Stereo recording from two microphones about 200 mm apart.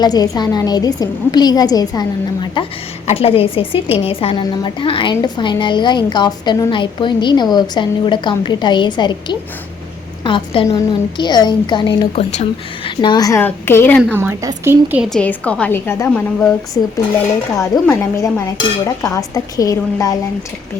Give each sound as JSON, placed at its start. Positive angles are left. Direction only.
{"t": 0.0, "sound": "a woman's voice", "side_deg": 20}
{"t": 14.2, "sound": "a woman's voice", "side_deg": -15}
{"t": 17.6, "sound": "a woman's voice", "side_deg": 10}